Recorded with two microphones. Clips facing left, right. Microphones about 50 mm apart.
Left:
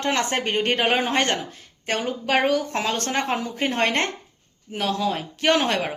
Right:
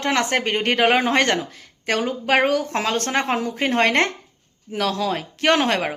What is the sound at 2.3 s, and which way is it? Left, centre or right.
Speech, right.